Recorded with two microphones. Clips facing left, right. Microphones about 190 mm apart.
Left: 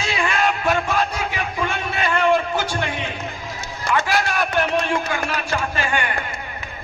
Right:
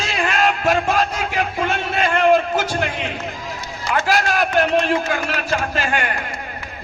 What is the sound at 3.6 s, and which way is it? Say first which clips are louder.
Run: left 2 dB; 45° left (ahead or behind).